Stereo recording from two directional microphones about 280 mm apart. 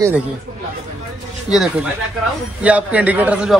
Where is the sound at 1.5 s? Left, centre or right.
Centre.